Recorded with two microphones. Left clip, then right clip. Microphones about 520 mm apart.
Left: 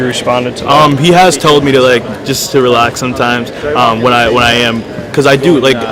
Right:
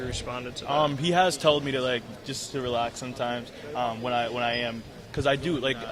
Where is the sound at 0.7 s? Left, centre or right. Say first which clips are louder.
Left 18 dB; right.